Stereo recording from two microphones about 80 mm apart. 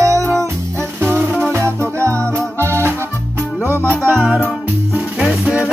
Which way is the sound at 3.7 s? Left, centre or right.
Right.